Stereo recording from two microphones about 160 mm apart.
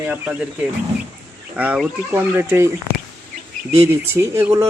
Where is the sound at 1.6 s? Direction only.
10° right (ahead or behind).